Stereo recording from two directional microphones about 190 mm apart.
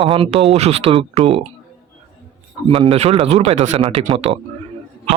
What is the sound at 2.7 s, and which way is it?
A man's voice, 30° right (ahead or behind).